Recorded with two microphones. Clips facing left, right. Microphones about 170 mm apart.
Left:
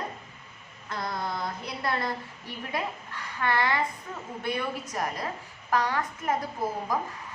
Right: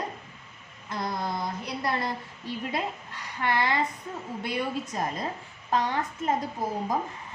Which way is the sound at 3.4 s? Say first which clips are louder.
Even; 15° right (ahead or behind).